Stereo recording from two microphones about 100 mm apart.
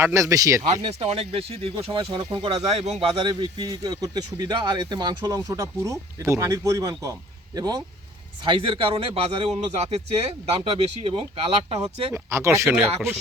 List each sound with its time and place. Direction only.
0.0 s speech: 30° right (ahead or behind)
0.9 s speech: 80° right; by 2.5 s 55° right (ahead or behind)
2.6 s speech: 90° right; by 7.9 s 40° right (ahead or behind)
8.4 s speech: 60° right (ahead or behind); by 12.0 s 85° right
12.1 s speech: 30° right (ahead or behind)